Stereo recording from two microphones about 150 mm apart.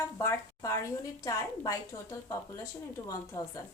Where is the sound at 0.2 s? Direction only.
20° left (ahead or behind).